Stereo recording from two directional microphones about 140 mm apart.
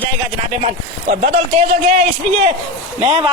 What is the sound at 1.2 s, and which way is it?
Speech, 55° right (ahead or behind).